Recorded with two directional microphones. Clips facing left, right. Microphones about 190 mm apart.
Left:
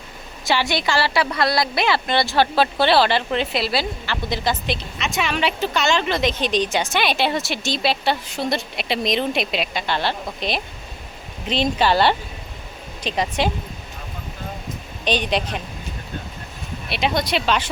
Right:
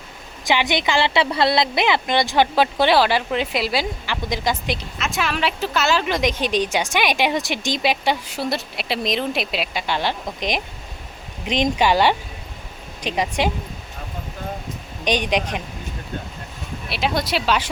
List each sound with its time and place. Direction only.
0.4 s a woman's voice: 15° right (ahead or behind)
4.9 s a woman's voice: centre (ahead or behind)
15.0 s a woman's voice: 15° right (ahead or behind)
16.9 s speech: 5° right (ahead or behind)